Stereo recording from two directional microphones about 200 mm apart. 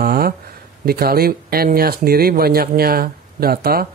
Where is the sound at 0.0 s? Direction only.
50° right (ahead or behind).